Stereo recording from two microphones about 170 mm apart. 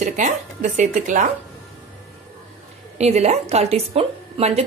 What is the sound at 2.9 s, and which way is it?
A woman's voice, 40° right (ahead or behind).